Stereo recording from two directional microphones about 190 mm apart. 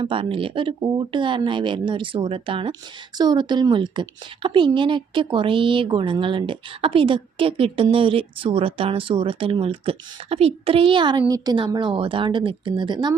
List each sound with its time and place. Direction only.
0.0 s a woman's voice: 25° right (ahead or behind)